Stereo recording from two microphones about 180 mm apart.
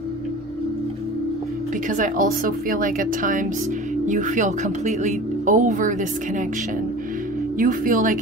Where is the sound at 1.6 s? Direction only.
45° right (ahead or behind).